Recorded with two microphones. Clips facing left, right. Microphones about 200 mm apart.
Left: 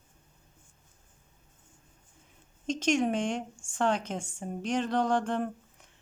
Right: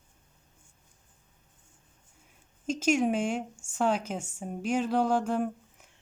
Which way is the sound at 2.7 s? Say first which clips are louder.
Right 1 dB; 5° right (ahead or behind).